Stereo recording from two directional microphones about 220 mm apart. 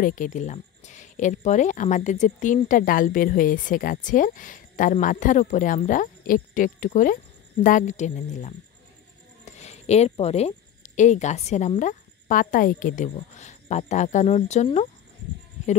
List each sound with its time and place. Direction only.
0.0 s a woman's voice: 35° left (ahead or behind)